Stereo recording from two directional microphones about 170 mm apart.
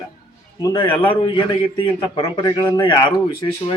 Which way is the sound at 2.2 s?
25° left (ahead or behind).